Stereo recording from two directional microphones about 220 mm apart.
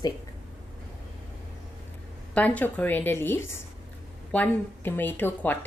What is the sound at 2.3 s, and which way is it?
A woman's voice, 5° left (ahead or behind).